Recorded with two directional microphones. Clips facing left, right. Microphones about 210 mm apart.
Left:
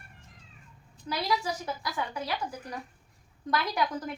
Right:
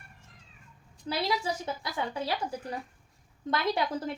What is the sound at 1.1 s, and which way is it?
A woman's voice, 30° right (ahead or behind).